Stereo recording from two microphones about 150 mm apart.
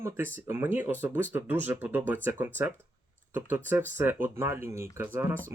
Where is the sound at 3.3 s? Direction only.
15° right (ahead or behind).